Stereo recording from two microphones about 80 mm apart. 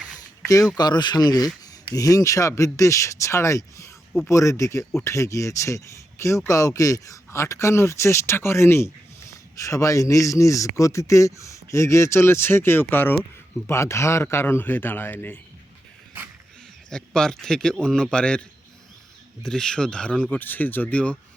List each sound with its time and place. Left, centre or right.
0.2 s a sound: left
0.8 s a man's voice: left
13.7 s a man's voice: left
17.2 s a man's voice: centre